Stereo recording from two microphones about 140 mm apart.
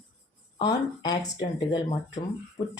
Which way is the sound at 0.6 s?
30° left (ahead or behind).